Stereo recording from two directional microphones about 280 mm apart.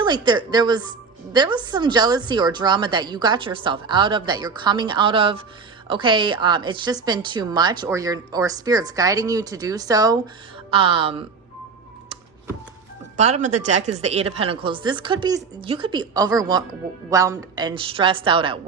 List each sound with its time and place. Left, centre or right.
0.0 s a woman's voice: centre
13.1 s a woman's voice: right